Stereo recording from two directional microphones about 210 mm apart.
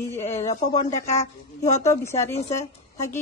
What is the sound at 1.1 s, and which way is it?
Speech, 35° left (ahead or behind).